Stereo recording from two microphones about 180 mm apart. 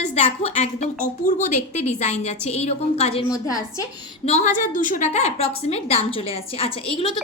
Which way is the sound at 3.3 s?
20° left (ahead or behind).